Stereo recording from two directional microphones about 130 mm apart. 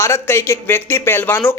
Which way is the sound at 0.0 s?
20° left (ahead or behind).